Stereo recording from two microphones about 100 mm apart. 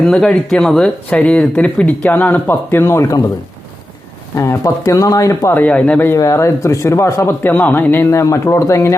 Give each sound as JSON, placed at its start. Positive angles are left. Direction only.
{"t": 0.0, "sound": "speech", "side_deg": 10}
{"t": 4.4, "sound": "speech", "side_deg": 30}
{"t": 5.5, "sound": "speech", "side_deg": 15}
{"t": 6.1, "sound": "speech", "side_deg": 30}